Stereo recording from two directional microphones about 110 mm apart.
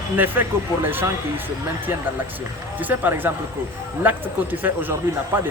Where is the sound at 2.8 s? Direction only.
15° right (ahead or behind).